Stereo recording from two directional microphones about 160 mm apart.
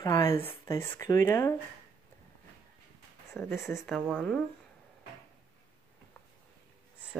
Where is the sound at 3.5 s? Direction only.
Centre (ahead or behind).